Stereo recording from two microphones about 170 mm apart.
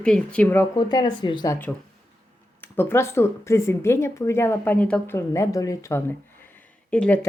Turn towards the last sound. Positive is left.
turn(degrees=5)  # may be behind; listen again after turning